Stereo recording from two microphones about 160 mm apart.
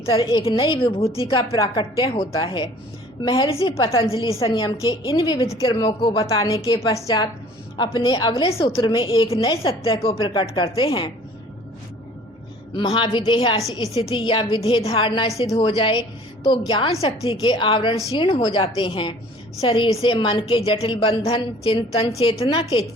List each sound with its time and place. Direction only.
0.1 s a woman's voice: 35° left (ahead or behind)
4.9 s a woman's voice: 25° left (ahead or behind)
12.7 s a woman's voice: 30° left (ahead or behind)